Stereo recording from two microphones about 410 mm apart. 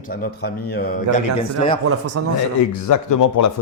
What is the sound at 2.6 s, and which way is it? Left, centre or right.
Speech, left.